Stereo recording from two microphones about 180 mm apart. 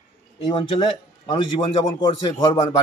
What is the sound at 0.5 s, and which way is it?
A man's voice, 30° left (ahead or behind).